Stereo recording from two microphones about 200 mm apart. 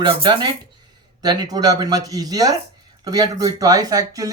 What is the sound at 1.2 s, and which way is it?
Speech, 20° right (ahead or behind).